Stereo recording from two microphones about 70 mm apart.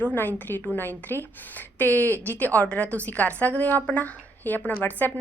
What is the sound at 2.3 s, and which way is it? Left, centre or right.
A woman's voice, left.